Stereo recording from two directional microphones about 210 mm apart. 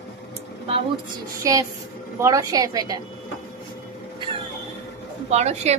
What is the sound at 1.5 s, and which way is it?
A woman's voice, 15° right (ahead or behind).